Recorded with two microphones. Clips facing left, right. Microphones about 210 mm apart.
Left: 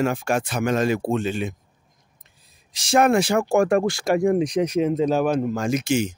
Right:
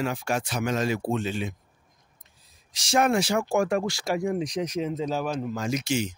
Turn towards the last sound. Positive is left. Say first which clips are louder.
# left 5 dB
turn(degrees=50)  # may be behind; listen again after turning